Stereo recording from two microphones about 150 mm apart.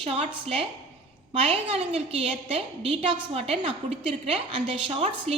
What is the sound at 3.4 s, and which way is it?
A woman's voice, 45° right (ahead or behind).